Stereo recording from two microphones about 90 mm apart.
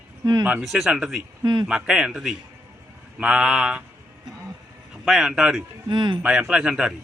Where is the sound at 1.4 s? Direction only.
50° right (ahead or behind).